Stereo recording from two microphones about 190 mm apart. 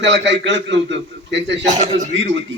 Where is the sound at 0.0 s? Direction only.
70° right (ahead or behind).